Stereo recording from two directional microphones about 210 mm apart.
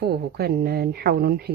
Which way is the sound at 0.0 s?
50° right (ahead or behind).